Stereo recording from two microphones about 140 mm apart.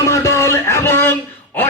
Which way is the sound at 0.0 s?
20° left (ahead or behind).